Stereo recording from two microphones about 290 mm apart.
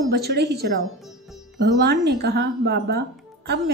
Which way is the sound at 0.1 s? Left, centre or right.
Right.